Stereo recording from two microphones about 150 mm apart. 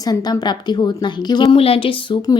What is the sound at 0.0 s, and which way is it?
A woman's voice, 25° left (ahead or behind).